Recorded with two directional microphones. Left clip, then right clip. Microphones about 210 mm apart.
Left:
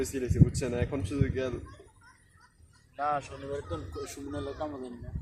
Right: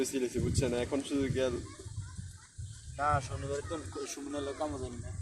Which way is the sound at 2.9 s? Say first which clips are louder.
Even; centre (ahead or behind).